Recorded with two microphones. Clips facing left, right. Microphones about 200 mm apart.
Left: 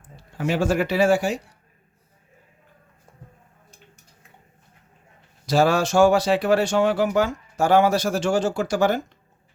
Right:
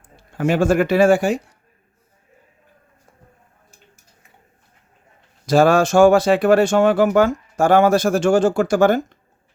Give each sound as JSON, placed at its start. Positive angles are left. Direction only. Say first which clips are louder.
{"t": 0.3, "sound": "speech", "louder": "right 5 dB", "side_deg": -55}
{"t": 5.5, "sound": "speech", "louder": "right 5 dB", "side_deg": -50}